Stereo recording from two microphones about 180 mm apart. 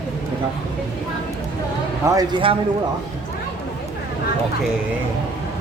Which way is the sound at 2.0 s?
15° right (ahead or behind).